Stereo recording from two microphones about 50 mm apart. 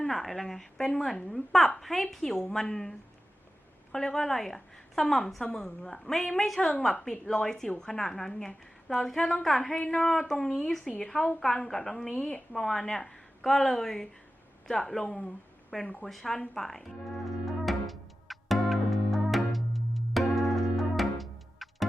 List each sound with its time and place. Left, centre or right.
0.1 s a woman's voice: centre
3.9 s a woman's voice: centre
6.6 s a woman's voice: centre
9.7 s a woman's voice: left
10.0 s a woman's voice: centre
17.4 s music: centre